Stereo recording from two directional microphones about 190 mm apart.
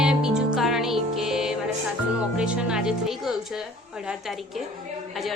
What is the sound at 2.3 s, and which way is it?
A man's voice, 5° right (ahead or behind).